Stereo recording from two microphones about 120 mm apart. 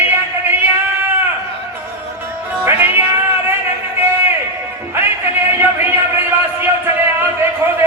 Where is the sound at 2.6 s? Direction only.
20° right (ahead or behind).